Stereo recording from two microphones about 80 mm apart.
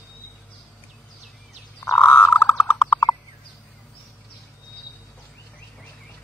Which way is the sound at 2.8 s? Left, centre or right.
Left.